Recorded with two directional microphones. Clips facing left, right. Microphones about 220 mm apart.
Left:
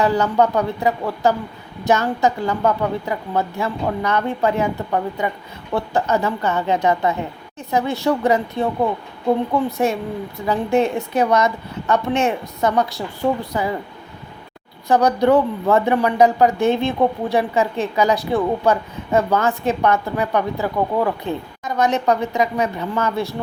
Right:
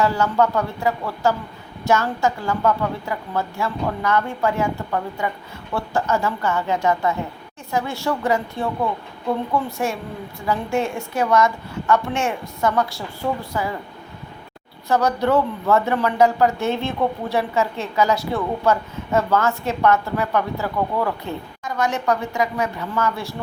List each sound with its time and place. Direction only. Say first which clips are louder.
0.0 s a woman's voice: left 2 dB; 20° left (ahead or behind)
14.8 s speech: left 4 dB; 15° left (ahead or behind)